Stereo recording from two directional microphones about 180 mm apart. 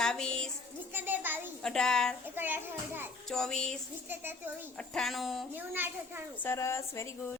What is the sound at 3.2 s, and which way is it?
Speech, 5° left (ahead or behind).